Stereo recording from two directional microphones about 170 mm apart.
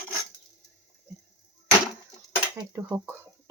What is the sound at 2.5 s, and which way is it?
Speech, 15° right (ahead or behind).